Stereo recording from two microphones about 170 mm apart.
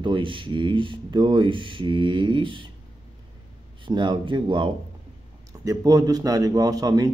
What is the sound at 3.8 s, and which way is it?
Speech, 25° right (ahead or behind).